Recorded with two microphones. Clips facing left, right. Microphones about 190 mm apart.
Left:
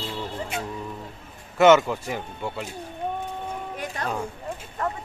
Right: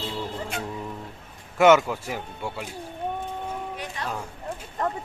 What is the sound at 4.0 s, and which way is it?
Speech, 45° left (ahead or behind).